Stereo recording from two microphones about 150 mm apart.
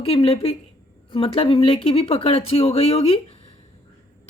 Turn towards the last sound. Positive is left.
turn(degrees=40)  # may be behind; listen again after turning